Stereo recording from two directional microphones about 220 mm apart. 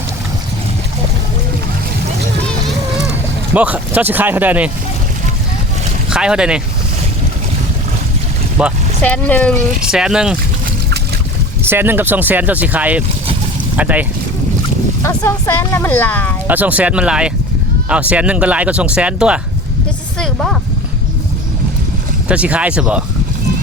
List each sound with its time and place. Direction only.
3.5 s speech: 5° right (ahead or behind)
6.1 s speech: 5° right (ahead or behind)
8.6 s speech: 5° right (ahead or behind)
9.0 s speech: 5° left (ahead or behind)
11.6 s speech: 10° right (ahead or behind)
15.0 s speech: 15° left (ahead or behind)
16.5 s speech: 5° right (ahead or behind)
20.1 s a sound: centre (ahead or behind)
22.3 s speech: 5° right (ahead or behind)